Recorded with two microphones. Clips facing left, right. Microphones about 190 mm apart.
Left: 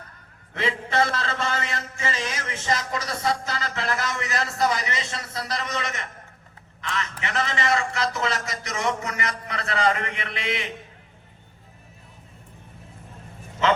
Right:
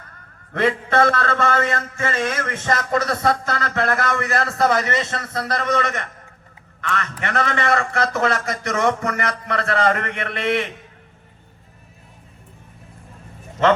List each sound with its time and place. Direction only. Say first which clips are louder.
0.5 s a man's voice: right 6 dB; 55° right (ahead or behind)